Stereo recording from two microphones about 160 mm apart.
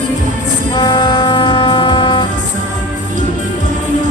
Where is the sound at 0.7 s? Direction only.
25° left (ahead or behind).